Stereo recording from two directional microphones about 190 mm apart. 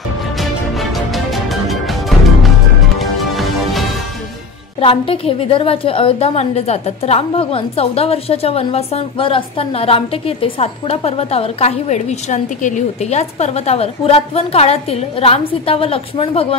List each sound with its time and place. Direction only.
0.4 s music: centre (ahead or behind)
4.7 s a woman's voice: 30° left (ahead or behind)